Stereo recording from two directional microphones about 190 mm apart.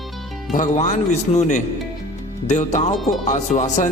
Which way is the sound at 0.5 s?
40° left (ahead or behind).